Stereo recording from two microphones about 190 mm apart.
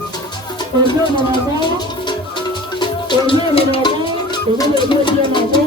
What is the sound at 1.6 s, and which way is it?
Music, 25° left (ahead or behind).